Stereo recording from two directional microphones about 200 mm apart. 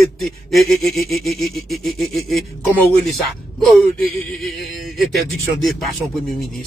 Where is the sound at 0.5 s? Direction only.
Centre (ahead or behind).